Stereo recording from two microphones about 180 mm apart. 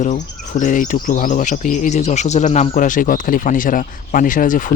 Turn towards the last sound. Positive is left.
turn(degrees=45)  # may be behind; listen again after turning